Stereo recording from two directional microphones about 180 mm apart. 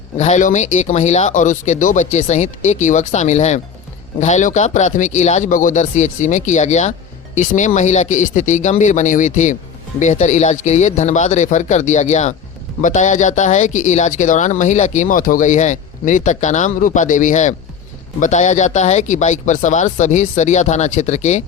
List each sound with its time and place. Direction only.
0.2 s speech: 40° left (ahead or behind)